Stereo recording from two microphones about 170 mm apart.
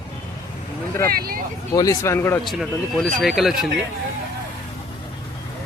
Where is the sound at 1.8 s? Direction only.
20° left (ahead or behind).